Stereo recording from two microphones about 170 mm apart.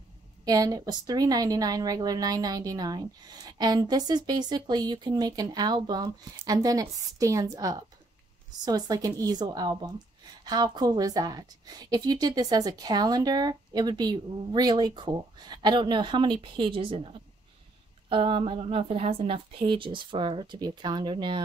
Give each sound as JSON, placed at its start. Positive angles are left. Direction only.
{"t": 0.5, "sound": "a woman's voice", "side_deg": -20}